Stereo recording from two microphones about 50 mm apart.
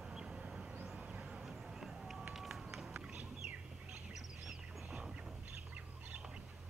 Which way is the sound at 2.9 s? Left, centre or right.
Centre.